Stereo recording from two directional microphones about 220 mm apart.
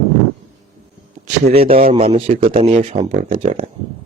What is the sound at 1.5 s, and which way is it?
Speech, 25° right (ahead or behind).